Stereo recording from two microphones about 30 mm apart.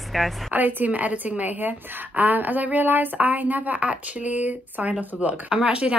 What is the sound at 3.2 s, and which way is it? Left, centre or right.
Speech, right.